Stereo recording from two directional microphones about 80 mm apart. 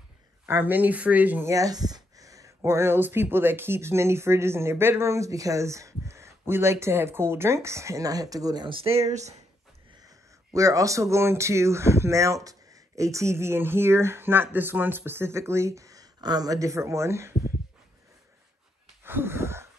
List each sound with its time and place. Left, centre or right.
0.5 s speech: right
1.4 s speech: right
8.9 s speech: right
10.0 s speech: right
19.0 s a sound: right